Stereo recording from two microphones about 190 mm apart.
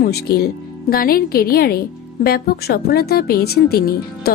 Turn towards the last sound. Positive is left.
turn(degrees=55)  # may be behind; listen again after turning